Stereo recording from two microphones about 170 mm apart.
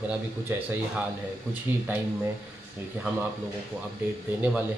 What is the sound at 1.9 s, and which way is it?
Speech, 10° right (ahead or behind).